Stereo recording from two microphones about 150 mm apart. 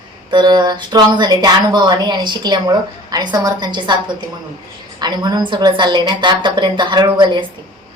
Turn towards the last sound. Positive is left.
turn(degrees=-30)  # may be behind; listen again after turning